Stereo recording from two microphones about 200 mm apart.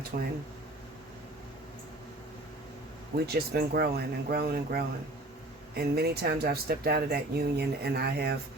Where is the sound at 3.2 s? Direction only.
55° right (ahead or behind).